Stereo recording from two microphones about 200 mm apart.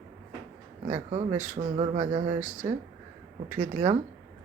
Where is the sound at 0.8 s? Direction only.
35° right (ahead or behind).